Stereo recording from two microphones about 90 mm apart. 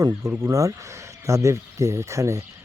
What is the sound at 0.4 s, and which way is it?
Speech, 40° right (ahead or behind).